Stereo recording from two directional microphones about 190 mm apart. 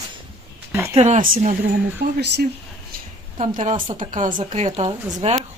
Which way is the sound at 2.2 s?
65° right (ahead or behind).